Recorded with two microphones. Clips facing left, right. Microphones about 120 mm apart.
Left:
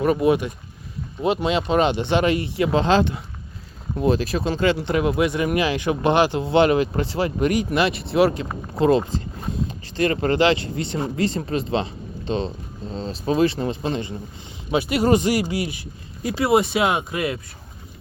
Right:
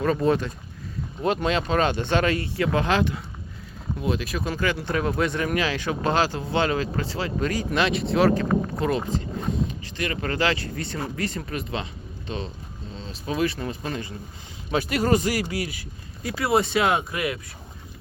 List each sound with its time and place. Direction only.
0.0 s speech: 15° left (ahead or behind)
7.3 s speech: 15° left (ahead or behind)
7.7 s speech: 5° left (ahead or behind)
8.8 s speech: 30° left (ahead or behind)
14.7 s speech: 10° left (ahead or behind)
15.1 s speech: 25° left (ahead or behind)